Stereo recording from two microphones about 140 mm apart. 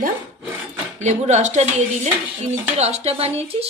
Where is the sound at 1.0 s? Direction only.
55° right (ahead or behind).